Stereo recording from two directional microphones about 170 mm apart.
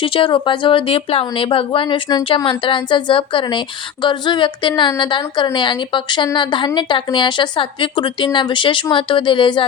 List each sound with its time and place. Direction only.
0.0 s a woman's voice: 30° left (ahead or behind)